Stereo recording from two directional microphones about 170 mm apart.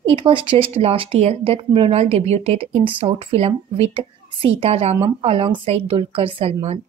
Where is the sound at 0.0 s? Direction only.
30° right (ahead or behind).